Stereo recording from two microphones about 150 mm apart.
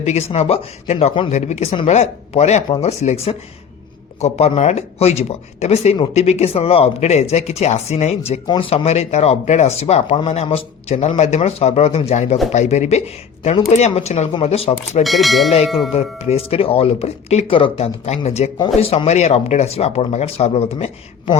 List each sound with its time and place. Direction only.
0.0 s speech: 45° left (ahead or behind)
1.3 s speech: 50° left (ahead or behind)
15.0 s speech: centre (ahead or behind)
15.9 s speech: 45° left (ahead or behind)
18.6 s speech: 35° left (ahead or behind)